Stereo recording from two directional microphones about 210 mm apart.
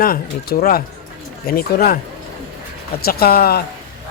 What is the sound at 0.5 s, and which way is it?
Speech, 35° left (ahead or behind).